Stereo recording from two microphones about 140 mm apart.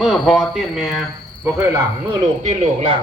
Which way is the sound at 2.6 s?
45° right (ahead or behind).